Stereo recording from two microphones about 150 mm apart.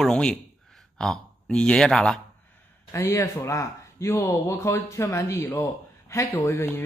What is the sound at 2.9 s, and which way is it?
Speech, 20° left (ahead or behind).